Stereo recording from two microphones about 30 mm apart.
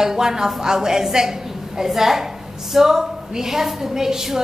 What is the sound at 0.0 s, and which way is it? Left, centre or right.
A woman's voice, centre.